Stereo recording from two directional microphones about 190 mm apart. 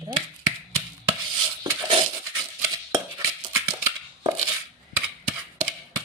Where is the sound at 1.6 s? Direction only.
30° right (ahead or behind).